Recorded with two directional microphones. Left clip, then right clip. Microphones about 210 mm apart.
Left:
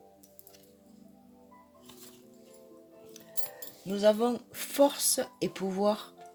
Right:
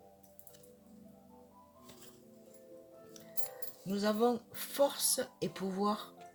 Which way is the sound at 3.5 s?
40° left (ahead or behind).